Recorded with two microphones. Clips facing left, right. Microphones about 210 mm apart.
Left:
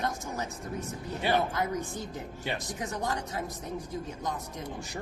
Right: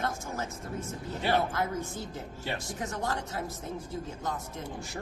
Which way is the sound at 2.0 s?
20° left (ahead or behind).